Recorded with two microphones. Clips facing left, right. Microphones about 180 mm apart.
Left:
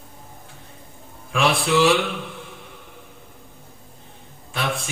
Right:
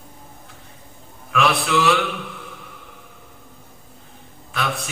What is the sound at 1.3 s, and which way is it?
Mantra, 30° left (ahead or behind).